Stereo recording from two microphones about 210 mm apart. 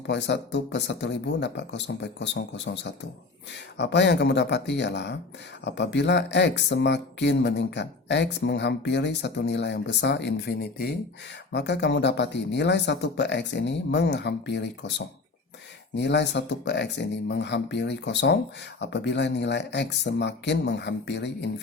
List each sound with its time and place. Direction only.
0.1 s speech: 55° left (ahead or behind)